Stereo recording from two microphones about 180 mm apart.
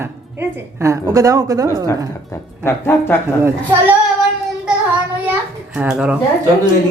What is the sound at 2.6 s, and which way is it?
Speech, 10° left (ahead or behind).